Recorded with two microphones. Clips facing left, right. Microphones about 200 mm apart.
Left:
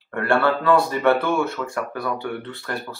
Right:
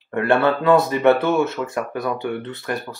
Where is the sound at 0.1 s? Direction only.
20° right (ahead or behind).